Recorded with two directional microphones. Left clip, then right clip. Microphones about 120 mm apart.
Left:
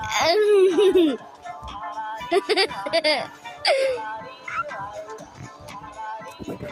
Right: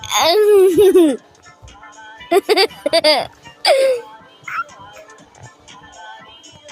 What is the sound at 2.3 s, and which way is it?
Music, 70° right (ahead or behind).